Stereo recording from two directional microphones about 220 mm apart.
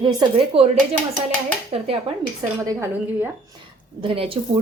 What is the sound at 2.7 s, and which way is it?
Speech, 10° right (ahead or behind).